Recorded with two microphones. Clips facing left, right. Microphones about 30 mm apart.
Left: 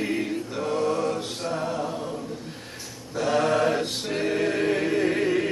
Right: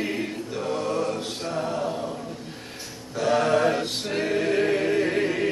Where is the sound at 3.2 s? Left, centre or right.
Centre.